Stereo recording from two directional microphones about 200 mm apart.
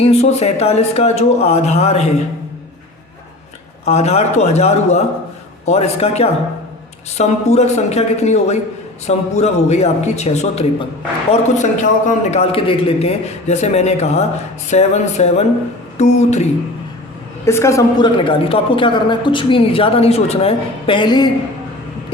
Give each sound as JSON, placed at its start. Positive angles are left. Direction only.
{"t": 0.0, "sound": "a man's voice", "side_deg": 30}
{"t": 3.8, "sound": "a man's voice", "side_deg": 30}
{"t": 17.4, "sound": "a woman's voice", "side_deg": 15}